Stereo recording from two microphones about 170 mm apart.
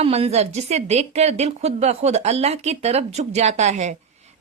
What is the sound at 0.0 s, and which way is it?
A woman's voice, 35° right (ahead or behind).